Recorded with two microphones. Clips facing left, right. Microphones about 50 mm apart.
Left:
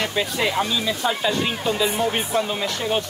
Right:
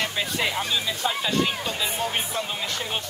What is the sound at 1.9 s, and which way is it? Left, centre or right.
Speech, left.